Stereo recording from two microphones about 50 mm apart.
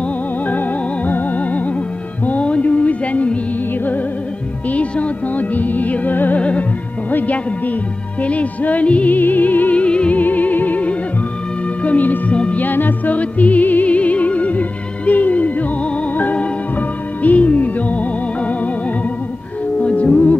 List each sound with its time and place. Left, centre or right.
0.0 s music: left
4.6 s music: left
9.8 s music: left
10.2 s music: left